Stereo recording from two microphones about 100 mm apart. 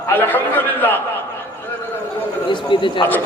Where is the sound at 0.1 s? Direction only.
20° left (ahead or behind).